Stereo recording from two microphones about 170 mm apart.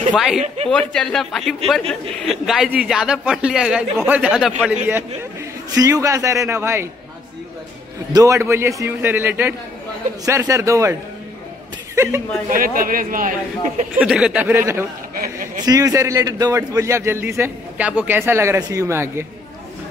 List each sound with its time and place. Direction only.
0.1 s a man's voice: centre (ahead or behind)
4.8 s a man's voice: 15° right (ahead or behind)
8.1 s a man's voice: 20° right (ahead or behind)
11.9 s a sound: 15° right (ahead or behind)
12.4 s a man's voice: 55° right (ahead or behind)
13.9 s a man's voice: 5° right (ahead or behind)
15.1 s speech: 55° right (ahead or behind)
15.6 s a man's voice: 20° right (ahead or behind)